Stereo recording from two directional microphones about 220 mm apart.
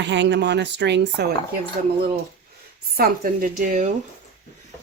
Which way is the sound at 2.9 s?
40° right (ahead or behind).